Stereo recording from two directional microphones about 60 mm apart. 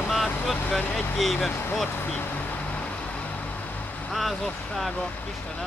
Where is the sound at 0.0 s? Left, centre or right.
Centre.